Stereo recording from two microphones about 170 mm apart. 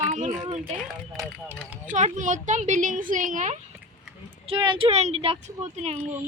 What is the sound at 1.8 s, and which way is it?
Speech, 45° right (ahead or behind).